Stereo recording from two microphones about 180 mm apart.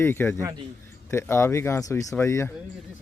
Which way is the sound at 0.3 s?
15° right (ahead or behind).